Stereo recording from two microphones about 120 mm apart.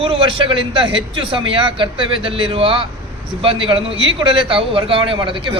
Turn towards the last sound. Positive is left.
turn(degrees=-45)  # may be behind; listen again after turning